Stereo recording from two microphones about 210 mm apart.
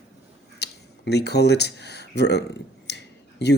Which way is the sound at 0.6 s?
50° left (ahead or behind).